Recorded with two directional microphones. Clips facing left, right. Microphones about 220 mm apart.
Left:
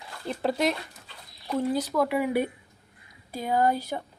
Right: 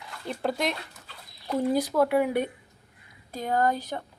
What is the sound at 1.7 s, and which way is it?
Speech, 15° right (ahead or behind).